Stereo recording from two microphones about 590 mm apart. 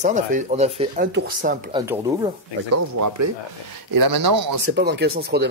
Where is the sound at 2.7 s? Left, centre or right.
Right.